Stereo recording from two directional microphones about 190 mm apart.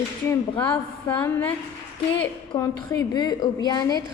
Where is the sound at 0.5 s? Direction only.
25° left (ahead or behind).